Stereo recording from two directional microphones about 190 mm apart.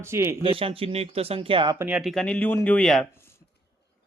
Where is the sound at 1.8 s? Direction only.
5° right (ahead or behind).